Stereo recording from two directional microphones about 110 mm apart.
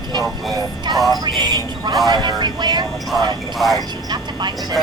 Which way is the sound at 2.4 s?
40° right (ahead or behind).